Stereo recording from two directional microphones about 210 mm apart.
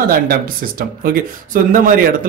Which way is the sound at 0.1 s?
45° right (ahead or behind).